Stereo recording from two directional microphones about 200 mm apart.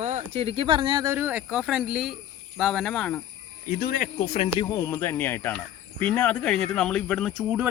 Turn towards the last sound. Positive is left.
turn(degrees=-5)  # may be behind; listen again after turning